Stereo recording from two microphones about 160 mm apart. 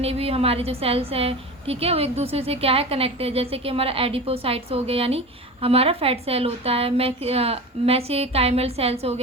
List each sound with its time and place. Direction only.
0.0 s a woman's voice: 40° right (ahead or behind)